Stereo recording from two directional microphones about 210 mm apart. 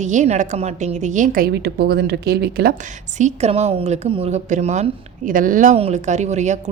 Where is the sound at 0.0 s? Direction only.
35° right (ahead or behind).